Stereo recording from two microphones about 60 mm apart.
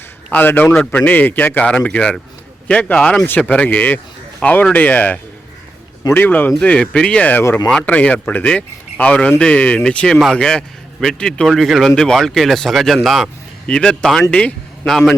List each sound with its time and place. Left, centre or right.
0.3 s a man's voice: left
0.8 s a man's voice: left
6.6 s a man's voice: centre
13.7 s speech: centre
14.3 s speech: left
14.8 s a man's voice: centre